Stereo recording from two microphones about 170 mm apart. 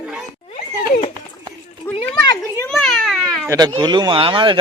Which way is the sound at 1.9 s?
10° left (ahead or behind).